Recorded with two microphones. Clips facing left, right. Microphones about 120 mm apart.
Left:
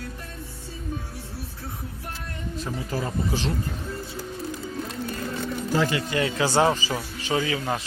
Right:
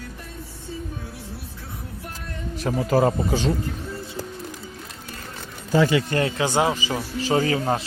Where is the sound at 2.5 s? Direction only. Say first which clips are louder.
Right 10 dB; 75° right (ahead or behind).